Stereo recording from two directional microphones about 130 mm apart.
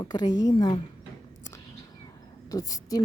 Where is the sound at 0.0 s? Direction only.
30° left (ahead or behind).